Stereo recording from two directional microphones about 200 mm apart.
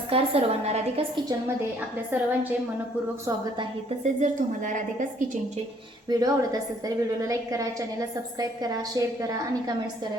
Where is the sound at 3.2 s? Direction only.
20° right (ahead or behind).